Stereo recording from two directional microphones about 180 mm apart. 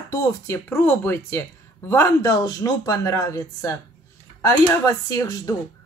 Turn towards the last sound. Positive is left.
turn(degrees=20)  # may be behind; listen again after turning